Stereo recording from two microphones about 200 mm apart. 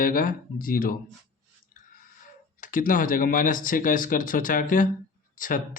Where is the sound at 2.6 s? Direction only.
40° left (ahead or behind).